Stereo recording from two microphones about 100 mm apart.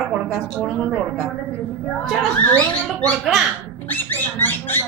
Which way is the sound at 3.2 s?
Centre (ahead or behind).